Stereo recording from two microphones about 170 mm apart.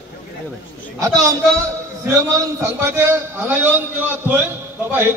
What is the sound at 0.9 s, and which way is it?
A man's voice, 20° right (ahead or behind).